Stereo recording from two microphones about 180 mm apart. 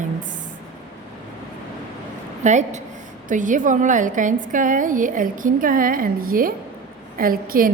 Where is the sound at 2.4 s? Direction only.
40° right (ahead or behind).